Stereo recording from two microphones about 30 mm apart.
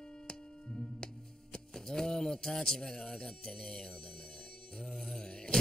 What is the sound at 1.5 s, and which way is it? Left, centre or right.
A man's voice, centre.